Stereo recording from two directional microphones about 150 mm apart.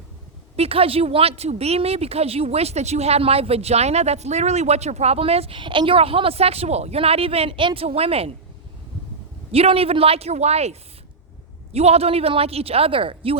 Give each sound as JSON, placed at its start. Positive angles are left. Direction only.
{"t": 0.5, "sound": "speech", "side_deg": -40}
{"t": 9.5, "sound": "speech", "side_deg": -40}